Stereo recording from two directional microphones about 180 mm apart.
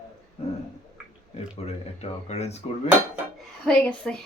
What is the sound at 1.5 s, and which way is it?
Speech, 35° left (ahead or behind).